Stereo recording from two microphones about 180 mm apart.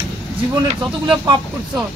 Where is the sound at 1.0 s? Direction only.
25° right (ahead or behind).